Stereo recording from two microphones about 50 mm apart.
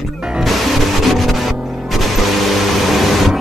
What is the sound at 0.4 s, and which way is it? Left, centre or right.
Music, centre.